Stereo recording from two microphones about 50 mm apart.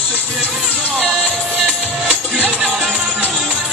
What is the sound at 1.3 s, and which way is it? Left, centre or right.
Music, left.